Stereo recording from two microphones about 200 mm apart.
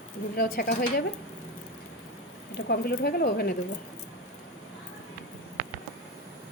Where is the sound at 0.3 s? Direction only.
50° left (ahead or behind).